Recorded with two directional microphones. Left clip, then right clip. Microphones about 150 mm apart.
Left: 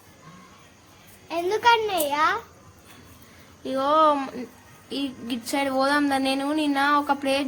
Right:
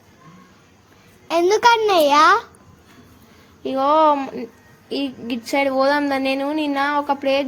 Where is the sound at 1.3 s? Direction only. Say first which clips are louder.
Right 6 dB; 55° right (ahead or behind).